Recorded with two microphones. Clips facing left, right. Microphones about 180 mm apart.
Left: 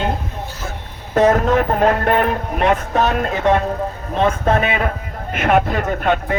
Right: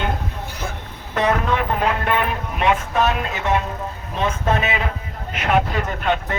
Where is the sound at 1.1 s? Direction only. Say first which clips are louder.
Left 6 dB; 45° left (ahead or behind).